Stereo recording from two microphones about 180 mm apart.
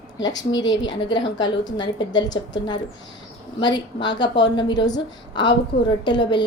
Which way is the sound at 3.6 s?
25° left (ahead or behind).